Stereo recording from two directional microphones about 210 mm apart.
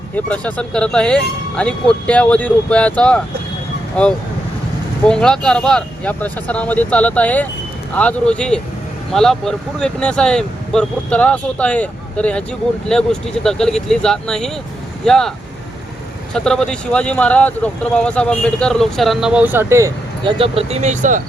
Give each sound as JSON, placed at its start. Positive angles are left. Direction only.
{"t": 0.3, "sound": "speech", "side_deg": 5}
{"t": 16.3, "sound": "speech", "side_deg": 5}
{"t": 20.4, "sound": "speech", "side_deg": -30}